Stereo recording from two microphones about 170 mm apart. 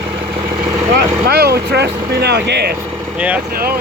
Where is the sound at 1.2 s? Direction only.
75° right (ahead or behind).